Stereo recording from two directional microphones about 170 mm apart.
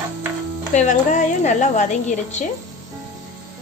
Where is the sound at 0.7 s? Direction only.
45° left (ahead or behind).